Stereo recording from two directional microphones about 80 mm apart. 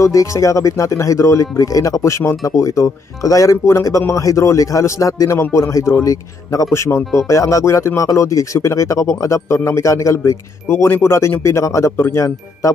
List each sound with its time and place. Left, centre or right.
0.0 s speech: left